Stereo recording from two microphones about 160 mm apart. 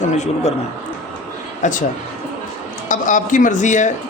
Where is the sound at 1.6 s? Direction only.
55° left (ahead or behind).